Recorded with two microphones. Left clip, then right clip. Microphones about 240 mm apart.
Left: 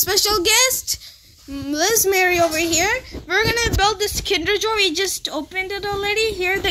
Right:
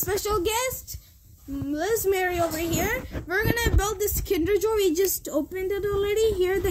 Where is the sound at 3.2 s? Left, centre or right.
Centre.